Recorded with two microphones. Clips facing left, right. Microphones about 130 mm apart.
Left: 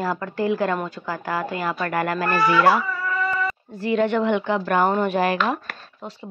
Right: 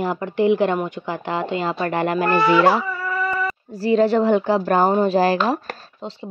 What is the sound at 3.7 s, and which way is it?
Speech, 35° right (ahead or behind).